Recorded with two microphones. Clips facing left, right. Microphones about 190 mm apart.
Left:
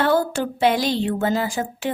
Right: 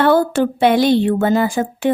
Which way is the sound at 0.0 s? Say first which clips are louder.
Right 6 dB; 60° right (ahead or behind).